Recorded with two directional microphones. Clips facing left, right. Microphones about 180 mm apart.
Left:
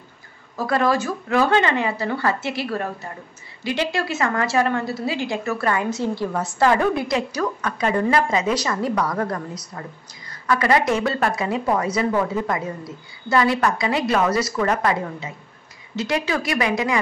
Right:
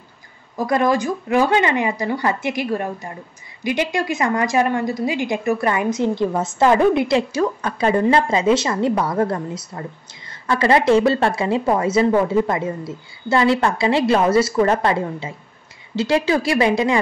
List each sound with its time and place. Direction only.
0.6 s a woman's voice: 15° right (ahead or behind)